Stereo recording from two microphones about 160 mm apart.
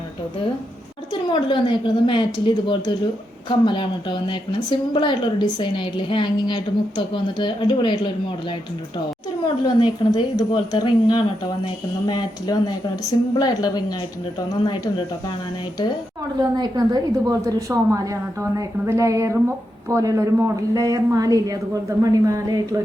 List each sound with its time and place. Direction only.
1.1 s a woman's voice: 30° left (ahead or behind)
9.6 s a woman's voice: 30° left (ahead or behind)
16.4 s a woman's voice: 25° right (ahead or behind)